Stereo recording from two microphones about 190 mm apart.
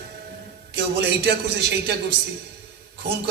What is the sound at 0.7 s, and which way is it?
A man's voice, 55° right (ahead or behind).